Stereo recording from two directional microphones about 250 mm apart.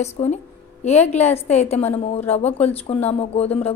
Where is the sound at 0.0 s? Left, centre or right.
Left.